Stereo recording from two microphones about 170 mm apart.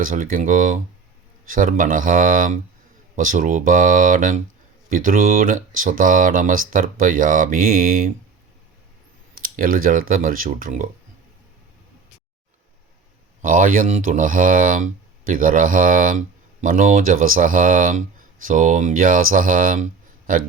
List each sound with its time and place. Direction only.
0.0 s speech: 55° right (ahead or behind)
9.4 s speech: 55° right (ahead or behind)
13.4 s speech: 50° right (ahead or behind)